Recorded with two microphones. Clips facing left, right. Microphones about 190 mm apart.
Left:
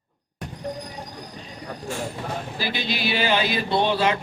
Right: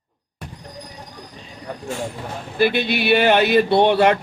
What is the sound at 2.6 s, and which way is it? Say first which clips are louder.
Speech: right 11 dB; 60° right (ahead or behind).